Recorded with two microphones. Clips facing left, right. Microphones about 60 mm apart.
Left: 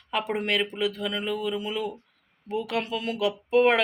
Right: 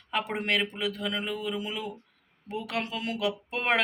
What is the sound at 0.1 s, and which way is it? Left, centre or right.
Speech, right.